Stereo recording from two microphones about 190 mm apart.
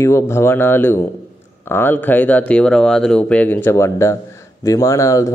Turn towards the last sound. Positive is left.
turn(degrees=15)  # may be behind; listen again after turning